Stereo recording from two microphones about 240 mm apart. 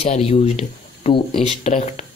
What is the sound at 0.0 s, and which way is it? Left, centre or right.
Speech, left.